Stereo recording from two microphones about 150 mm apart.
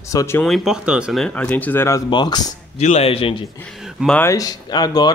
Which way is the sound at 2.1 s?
30° left (ahead or behind).